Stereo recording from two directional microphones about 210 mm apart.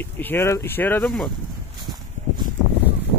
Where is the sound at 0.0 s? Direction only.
10° left (ahead or behind).